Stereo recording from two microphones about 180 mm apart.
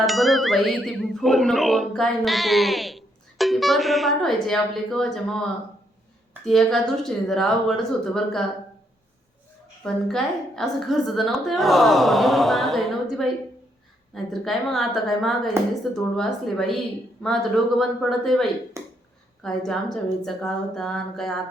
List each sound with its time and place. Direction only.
0.0 s speech: centre (ahead or behind)
9.8 s speech: 5° left (ahead or behind)
17.7 s speech: centre (ahead or behind)
18.8 s a sound: 15° right (ahead or behind)
19.4 s speech: 5° left (ahead or behind)